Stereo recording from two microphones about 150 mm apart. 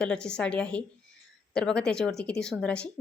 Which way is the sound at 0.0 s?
5° left (ahead or behind).